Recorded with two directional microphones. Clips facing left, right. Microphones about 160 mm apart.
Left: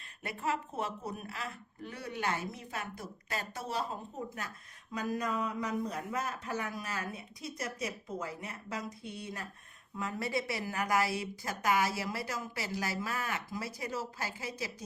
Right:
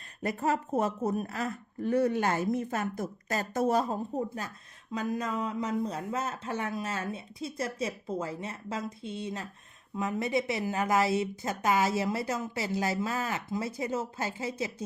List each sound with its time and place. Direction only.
0.2 s a woman's voice: 40° right (ahead or behind)
4.9 s speech: 25° right (ahead or behind)